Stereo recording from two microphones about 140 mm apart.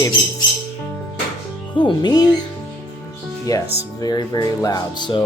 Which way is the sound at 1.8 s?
30° left (ahead or behind).